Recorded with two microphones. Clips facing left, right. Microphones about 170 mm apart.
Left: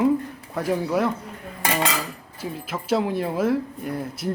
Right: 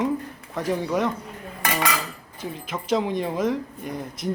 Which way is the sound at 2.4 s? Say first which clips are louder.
Left 1 dB; 5° left (ahead or behind).